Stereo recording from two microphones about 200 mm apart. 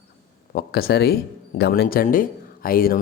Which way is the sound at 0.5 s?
50° left (ahead or behind).